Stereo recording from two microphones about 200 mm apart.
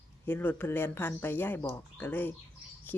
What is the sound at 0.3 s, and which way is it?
Speech, 10° left (ahead or behind).